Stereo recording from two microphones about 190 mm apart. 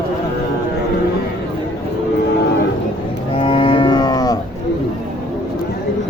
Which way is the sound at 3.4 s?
30° left (ahead or behind).